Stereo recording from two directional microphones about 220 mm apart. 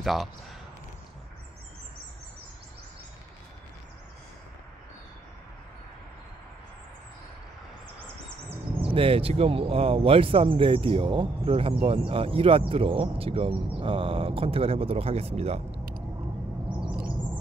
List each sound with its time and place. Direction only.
0.0 s speech: centre (ahead or behind)
8.5 s speech: 25° right (ahead or behind)